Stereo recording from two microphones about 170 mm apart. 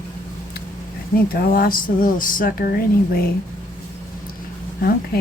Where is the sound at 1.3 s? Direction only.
60° left (ahead or behind).